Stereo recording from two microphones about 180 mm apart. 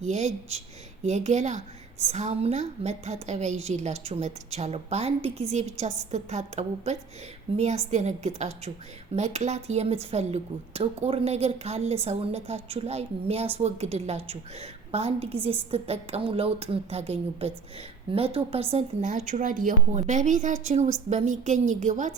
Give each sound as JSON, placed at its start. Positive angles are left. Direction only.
{"t": 0.0, "sound": "a woman's voice", "side_deg": -40}